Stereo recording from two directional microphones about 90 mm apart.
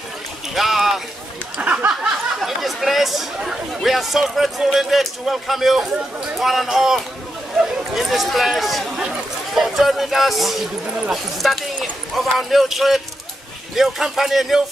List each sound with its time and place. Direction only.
0.6 s clip-clop: centre (ahead or behind)
1.6 s a sound: 15° right (ahead or behind)
2.4 s speech: centre (ahead or behind)